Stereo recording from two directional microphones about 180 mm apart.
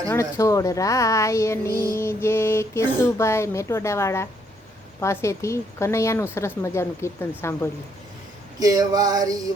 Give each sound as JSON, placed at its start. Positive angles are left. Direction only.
{"t": 0.1, "sound": "speech", "side_deg": 15}
{"t": 8.5, "sound": "male singing", "side_deg": -20}